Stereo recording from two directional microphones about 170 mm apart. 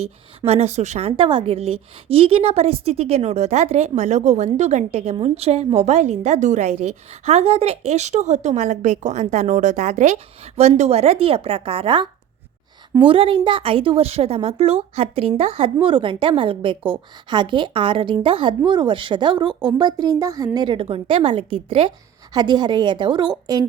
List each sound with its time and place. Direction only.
0.4 s a woman's voice: 40° right (ahead or behind)
13.1 s a woman's voice: 30° right (ahead or behind)